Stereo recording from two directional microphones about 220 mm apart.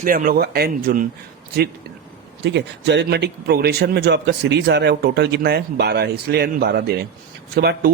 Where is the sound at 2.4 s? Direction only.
50° right (ahead or behind).